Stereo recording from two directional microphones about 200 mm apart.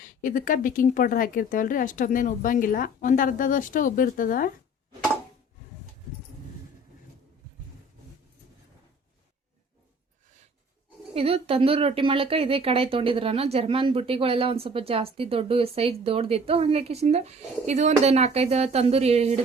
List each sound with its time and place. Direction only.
0.0 s speech: 40° left (ahead or behind)
11.1 s speech: 30° right (ahead or behind)